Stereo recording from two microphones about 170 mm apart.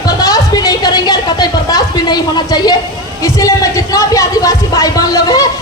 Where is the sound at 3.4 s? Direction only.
20° left (ahead or behind).